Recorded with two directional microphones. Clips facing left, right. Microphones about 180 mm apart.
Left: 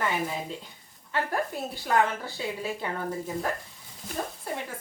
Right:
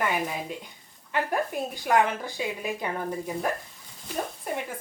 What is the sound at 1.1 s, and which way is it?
A woman's voice, 15° right (ahead or behind).